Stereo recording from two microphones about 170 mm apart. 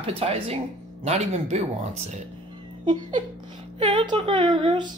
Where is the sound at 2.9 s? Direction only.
30° right (ahead or behind).